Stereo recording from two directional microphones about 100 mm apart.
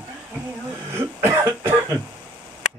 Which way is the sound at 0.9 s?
30° right (ahead or behind).